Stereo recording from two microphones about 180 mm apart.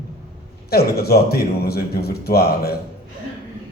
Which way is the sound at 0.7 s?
60° left (ahead or behind).